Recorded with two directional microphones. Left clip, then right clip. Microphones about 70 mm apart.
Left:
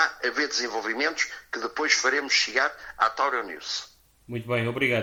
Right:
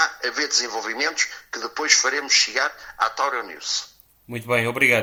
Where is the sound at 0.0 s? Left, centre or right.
Left.